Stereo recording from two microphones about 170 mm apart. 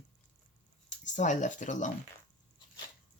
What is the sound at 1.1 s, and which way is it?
Speech, 45° left (ahead or behind).